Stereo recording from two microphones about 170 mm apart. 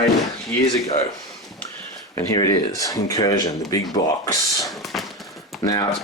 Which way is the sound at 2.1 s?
20° left (ahead or behind).